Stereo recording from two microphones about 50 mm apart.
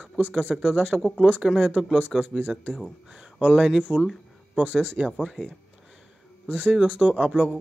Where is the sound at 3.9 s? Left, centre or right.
Centre.